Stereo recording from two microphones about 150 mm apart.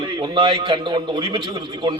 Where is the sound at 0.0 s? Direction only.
35° right (ahead or behind).